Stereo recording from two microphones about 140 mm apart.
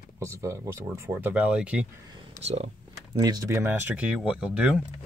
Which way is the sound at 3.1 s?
30° right (ahead or behind).